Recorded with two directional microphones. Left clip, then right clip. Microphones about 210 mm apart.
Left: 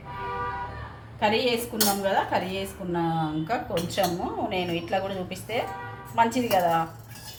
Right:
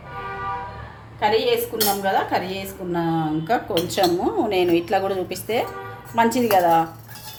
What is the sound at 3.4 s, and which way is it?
Speech, 35° right (ahead or behind).